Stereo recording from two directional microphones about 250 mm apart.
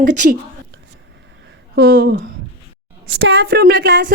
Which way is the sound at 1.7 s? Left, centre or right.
Right.